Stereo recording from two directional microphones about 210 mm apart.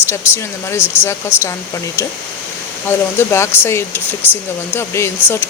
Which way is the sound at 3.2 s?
10° left (ahead or behind).